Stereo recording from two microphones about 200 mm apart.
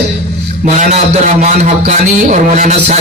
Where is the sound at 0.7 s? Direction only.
35° right (ahead or behind).